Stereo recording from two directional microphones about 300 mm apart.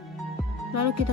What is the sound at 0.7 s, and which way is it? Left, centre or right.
Speech, right.